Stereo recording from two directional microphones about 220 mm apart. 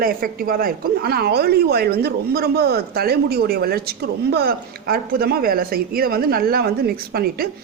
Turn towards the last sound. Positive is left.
turn(degrees=-45)  # may be behind; listen again after turning